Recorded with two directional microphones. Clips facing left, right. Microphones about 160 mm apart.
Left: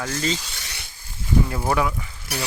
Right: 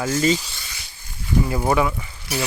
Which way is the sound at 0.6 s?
70° left (ahead or behind).